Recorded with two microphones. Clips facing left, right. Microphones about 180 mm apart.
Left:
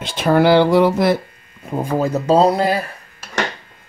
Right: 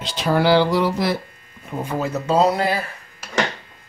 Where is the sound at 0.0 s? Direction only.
55° left (ahead or behind).